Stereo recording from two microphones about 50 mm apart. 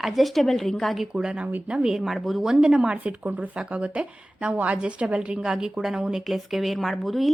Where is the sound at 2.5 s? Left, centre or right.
Centre.